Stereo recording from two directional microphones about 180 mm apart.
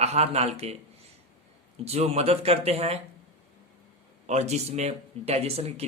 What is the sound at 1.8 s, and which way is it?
Speech, 35° right (ahead or behind).